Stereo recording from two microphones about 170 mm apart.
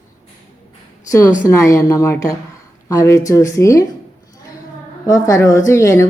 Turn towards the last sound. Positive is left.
turn(degrees=15)  # may be behind; listen again after turning